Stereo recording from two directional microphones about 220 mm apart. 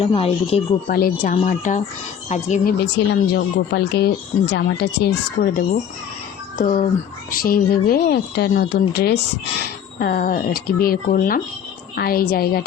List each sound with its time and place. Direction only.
0.0 s speech: 25° left (ahead or behind)
0.9 s speech: 40° left (ahead or behind)
2.8 s speech: 50° left (ahead or behind)